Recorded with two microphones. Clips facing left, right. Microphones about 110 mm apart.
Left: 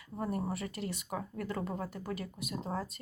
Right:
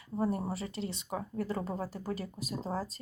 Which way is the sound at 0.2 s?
30° right (ahead or behind).